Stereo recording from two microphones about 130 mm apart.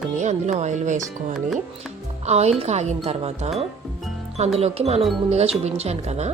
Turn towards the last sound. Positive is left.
turn(degrees=-55)  # may be behind; listen again after turning